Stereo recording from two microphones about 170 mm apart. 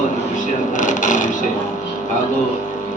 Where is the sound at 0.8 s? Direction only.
50° left (ahead or behind).